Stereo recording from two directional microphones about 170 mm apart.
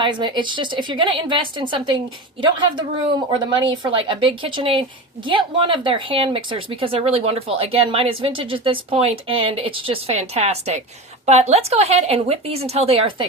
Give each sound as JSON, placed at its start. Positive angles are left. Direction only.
{"t": 0.0, "sound": "a woman's voice", "side_deg": -25}